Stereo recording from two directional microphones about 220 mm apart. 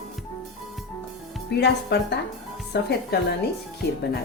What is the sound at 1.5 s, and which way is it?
A woman's voice, 50° left (ahead or behind).